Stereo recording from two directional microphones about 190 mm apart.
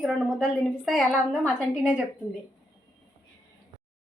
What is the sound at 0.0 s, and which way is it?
Speech, centre (ahead or behind).